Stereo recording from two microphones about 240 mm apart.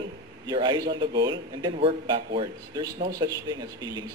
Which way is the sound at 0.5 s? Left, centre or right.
Centre.